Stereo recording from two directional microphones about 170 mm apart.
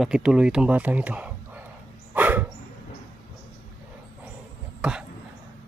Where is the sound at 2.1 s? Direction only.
10° right (ahead or behind).